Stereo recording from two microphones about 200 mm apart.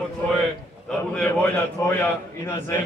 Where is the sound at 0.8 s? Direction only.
5° left (ahead or behind).